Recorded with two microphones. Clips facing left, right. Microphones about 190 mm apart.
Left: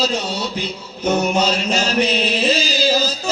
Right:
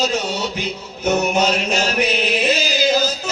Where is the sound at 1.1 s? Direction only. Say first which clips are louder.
Even; 10° right (ahead or behind).